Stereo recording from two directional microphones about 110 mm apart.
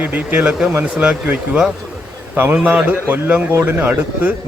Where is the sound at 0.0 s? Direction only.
15° right (ahead or behind).